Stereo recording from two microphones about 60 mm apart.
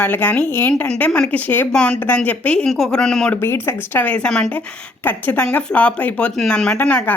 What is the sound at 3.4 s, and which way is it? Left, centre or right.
Speech, left.